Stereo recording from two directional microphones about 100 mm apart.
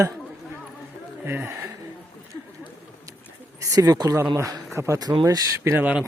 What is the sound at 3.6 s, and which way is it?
Speech, 35° right (ahead or behind).